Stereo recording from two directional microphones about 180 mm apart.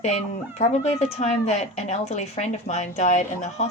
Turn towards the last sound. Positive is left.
turn(degrees=40)  # may be behind; listen again after turning